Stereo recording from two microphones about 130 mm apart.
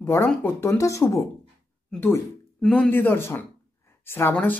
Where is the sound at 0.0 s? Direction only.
20° left (ahead or behind).